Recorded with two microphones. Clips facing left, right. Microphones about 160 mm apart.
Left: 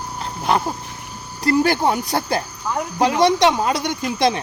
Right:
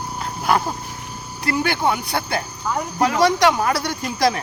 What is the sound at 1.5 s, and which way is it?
Speech, 35° left (ahead or behind).